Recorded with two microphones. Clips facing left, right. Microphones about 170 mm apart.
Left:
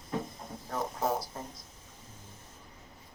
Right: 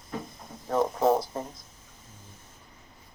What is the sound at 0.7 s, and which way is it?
Speech, 90° right.